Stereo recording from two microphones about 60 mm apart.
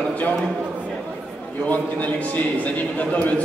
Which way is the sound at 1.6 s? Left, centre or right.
Left.